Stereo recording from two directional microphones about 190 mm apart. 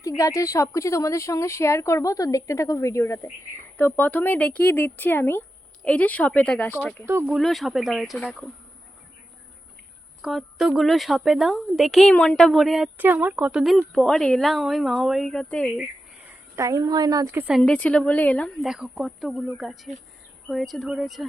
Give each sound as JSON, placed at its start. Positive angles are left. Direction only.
{"t": 0.0, "sound": "speech", "side_deg": 15}
{"t": 7.0, "sound": "speech", "side_deg": -10}
{"t": 7.3, "sound": "a woman's voice", "side_deg": 0}
{"t": 10.2, "sound": "a woman's voice", "side_deg": 0}
{"t": 16.6, "sound": "a woman's voice", "side_deg": -20}
{"t": 17.6, "sound": "a woman's voice", "side_deg": 5}